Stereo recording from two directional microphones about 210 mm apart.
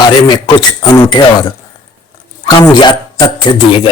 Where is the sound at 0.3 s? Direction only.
20° left (ahead or behind).